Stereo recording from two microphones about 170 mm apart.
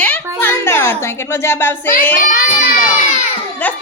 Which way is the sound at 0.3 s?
15° left (ahead or behind).